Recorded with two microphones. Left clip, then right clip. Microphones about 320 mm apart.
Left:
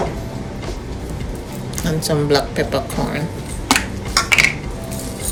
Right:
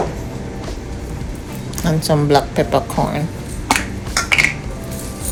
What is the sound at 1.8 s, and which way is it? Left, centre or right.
Speech, centre.